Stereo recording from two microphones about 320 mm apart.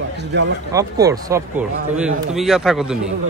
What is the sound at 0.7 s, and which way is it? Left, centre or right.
A man's voice, centre.